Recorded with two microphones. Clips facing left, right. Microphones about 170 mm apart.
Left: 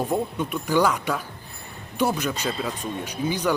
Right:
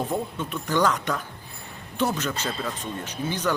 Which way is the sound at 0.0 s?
10° left (ahead or behind).